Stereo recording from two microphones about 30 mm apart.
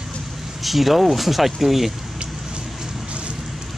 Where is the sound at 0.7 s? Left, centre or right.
Centre.